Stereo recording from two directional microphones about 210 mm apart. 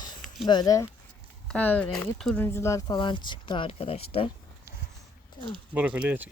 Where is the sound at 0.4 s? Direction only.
20° left (ahead or behind).